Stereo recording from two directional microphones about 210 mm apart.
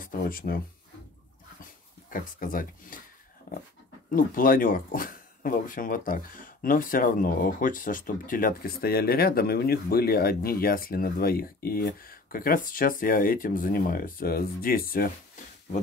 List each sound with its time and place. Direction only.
0.0 s speech: 40° left (ahead or behind)
1.6 s speech: 40° left (ahead or behind)
4.1 s speech: 40° left (ahead or behind)